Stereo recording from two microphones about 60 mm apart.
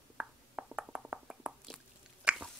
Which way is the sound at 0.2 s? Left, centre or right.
Centre.